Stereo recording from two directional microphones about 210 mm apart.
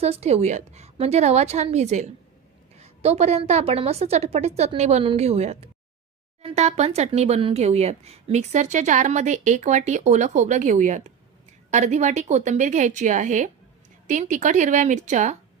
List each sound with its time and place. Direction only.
0.0 s speech: 30° right (ahead or behind)